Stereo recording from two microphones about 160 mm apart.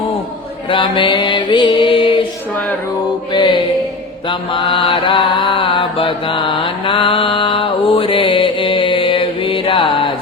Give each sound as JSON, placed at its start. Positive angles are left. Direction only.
{"t": 0.7, "sound": "mantra", "side_deg": 30}
{"t": 3.3, "sound": "music", "side_deg": 30}
{"t": 4.3, "sound": "mantra", "side_deg": 30}